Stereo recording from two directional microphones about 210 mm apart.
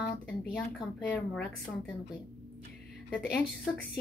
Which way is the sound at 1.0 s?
5° left (ahead or behind).